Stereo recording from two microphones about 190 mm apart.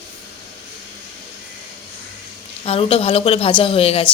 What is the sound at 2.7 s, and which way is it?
Speech, 30° left (ahead or behind).